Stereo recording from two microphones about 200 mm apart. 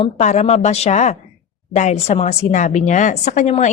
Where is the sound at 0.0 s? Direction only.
35° left (ahead or behind).